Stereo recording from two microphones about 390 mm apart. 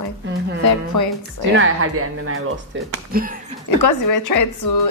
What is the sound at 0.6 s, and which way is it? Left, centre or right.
Speech, left.